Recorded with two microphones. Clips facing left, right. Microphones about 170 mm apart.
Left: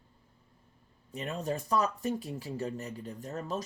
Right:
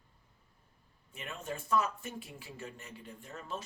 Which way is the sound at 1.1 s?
35° left (ahead or behind).